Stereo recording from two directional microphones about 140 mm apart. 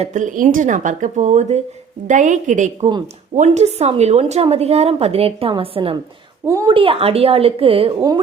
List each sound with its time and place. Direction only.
0.0 s a woman's voice: 65° right (ahead or behind); by 8.2 s 30° right (ahead or behind)